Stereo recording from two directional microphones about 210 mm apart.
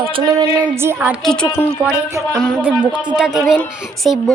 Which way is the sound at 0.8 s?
10° right (ahead or behind).